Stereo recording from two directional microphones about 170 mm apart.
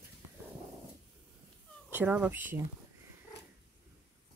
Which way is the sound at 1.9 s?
10° right (ahead or behind).